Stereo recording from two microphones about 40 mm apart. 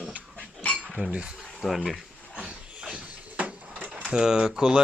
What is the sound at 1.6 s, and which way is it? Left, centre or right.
Speech, centre.